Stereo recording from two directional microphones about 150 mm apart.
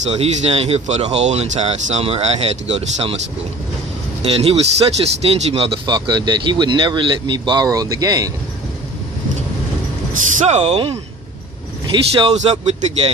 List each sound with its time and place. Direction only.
0.1 s speech: 45° right (ahead or behind)
4.2 s a man's voice: 40° right (ahead or behind); by 8.3 s 25° right (ahead or behind)
10.4 s a man's voice: 45° right (ahead or behind)